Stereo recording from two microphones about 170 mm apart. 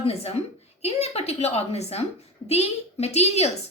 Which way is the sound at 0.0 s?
35° left (ahead or behind).